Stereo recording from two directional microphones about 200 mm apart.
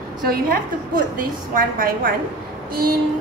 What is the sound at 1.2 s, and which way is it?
Speech, 45° right (ahead or behind).